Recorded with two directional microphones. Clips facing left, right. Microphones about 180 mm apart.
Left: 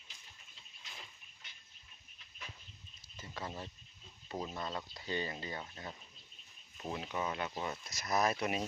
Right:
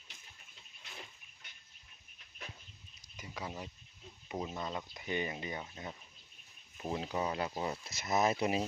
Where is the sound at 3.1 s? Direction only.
15° right (ahead or behind).